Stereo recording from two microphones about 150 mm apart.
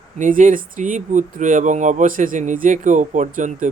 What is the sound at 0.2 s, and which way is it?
Speech, 60° right (ahead or behind).